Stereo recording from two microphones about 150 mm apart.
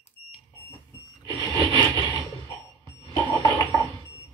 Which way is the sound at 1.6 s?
30° right (ahead or behind).